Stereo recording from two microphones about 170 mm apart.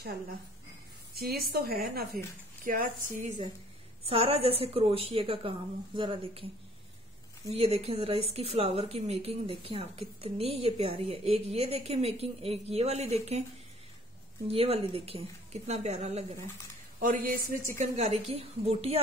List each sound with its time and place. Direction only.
1.1 s a woman's voice: 65° right (ahead or behind)
4.1 s a woman's voice: 35° right (ahead or behind)
7.4 s a woman's voice: 35° right (ahead or behind)
14.5 s a woman's voice: 35° right (ahead or behind)